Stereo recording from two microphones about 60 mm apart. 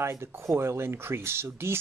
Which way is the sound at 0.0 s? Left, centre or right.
Right.